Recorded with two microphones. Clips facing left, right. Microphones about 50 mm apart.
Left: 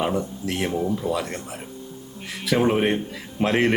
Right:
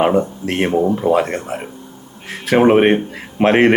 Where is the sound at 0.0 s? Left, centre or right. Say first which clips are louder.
Right 9 dB; right.